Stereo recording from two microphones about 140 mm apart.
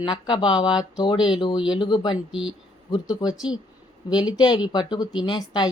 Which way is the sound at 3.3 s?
5° right (ahead or behind).